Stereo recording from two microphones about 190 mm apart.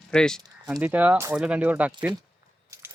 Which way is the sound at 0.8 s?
10° right (ahead or behind).